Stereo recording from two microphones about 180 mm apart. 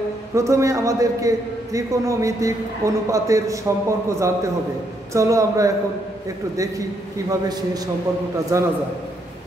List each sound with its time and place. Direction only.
0.3 s a man's voice: 15° right (ahead or behind)
7.2 s a man's voice: 20° right (ahead or behind)